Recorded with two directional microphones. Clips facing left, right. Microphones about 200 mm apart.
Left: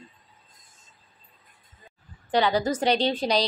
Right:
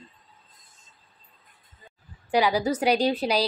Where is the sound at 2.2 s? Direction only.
10° right (ahead or behind).